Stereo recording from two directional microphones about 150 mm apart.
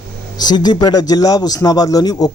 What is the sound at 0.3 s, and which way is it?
Speech, 30° left (ahead or behind).